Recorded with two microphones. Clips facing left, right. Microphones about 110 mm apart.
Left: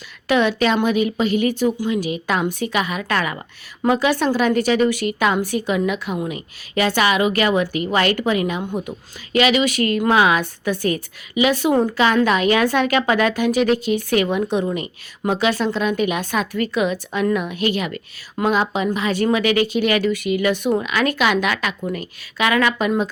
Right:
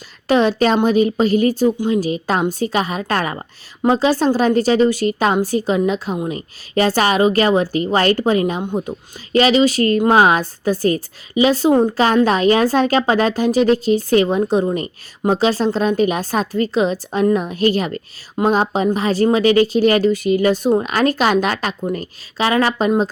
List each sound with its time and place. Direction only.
0.3 s a woman's voice: 35° right (ahead or behind)
12.0 s a woman's voice: 35° right (ahead or behind)